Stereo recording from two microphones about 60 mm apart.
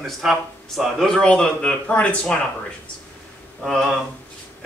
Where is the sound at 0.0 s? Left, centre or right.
Centre.